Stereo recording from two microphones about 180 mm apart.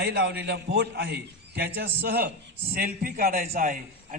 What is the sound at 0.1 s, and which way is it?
A man's voice, 70° right (ahead or behind).